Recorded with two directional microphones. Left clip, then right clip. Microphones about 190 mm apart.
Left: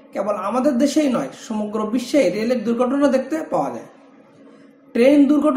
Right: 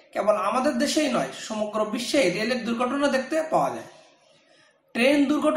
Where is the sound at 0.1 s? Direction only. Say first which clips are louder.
Left 1 dB; 35° left (ahead or behind).